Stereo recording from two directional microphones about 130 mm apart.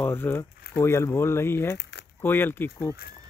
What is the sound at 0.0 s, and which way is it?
Speech, 15° left (ahead or behind).